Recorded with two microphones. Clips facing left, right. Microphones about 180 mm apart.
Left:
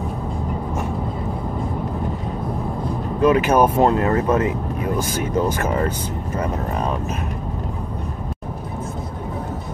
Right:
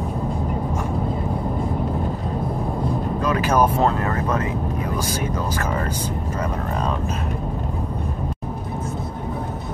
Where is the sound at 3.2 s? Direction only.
20° left (ahead or behind).